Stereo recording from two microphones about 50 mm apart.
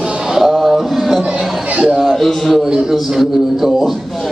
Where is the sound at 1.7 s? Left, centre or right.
Right.